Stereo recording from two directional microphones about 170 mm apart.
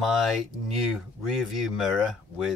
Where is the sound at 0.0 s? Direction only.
Centre (ahead or behind).